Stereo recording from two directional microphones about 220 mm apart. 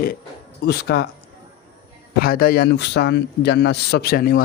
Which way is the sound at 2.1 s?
40° left (ahead or behind).